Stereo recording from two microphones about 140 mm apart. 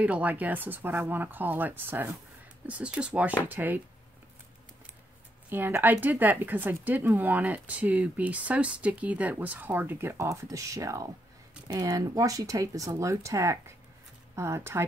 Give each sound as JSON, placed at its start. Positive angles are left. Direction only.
{"t": 0.0, "sound": "speech", "side_deg": -10}
{"t": 5.5, "sound": "speech", "side_deg": -15}